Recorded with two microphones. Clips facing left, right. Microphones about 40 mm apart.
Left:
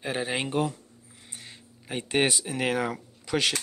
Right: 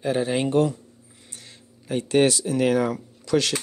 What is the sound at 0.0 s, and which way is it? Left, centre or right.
A man's voice, centre.